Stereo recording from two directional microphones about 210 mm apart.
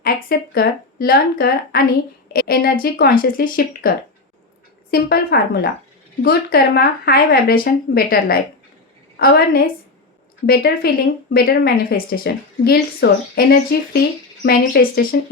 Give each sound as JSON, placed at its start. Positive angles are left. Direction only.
{"t": 0.0, "sound": "a woman's voice", "side_deg": 45}